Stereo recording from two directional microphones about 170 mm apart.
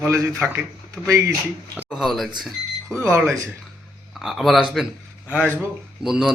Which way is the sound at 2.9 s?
15° right (ahead or behind).